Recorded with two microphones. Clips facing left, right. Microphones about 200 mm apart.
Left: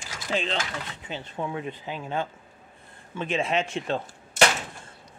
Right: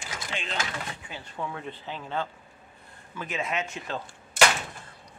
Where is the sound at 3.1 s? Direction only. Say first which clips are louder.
Left 6 dB; 25° left (ahead or behind).